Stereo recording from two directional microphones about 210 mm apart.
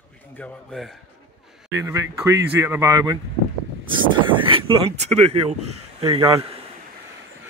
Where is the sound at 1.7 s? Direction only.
15° right (ahead or behind); by 5.7 s 30° right (ahead or behind).